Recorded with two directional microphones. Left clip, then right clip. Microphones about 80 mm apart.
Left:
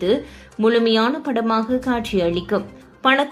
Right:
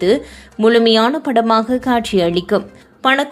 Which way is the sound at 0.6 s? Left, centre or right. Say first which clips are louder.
Right 5 dB; right.